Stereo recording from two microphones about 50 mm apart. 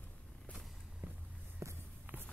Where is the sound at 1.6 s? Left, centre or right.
Right.